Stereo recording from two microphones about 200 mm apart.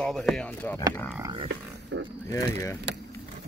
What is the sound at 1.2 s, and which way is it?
Didgeridoo, 25° right (ahead or behind).